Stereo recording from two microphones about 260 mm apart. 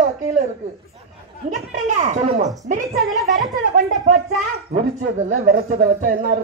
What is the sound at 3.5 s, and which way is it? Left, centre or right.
Speech, right.